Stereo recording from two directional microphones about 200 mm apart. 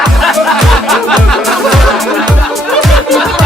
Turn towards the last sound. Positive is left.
turn(degrees=0)  # may be behind; listen again after turning